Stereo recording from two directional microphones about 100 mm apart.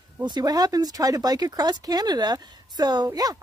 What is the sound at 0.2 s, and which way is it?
Speech, 45° right (ahead or behind).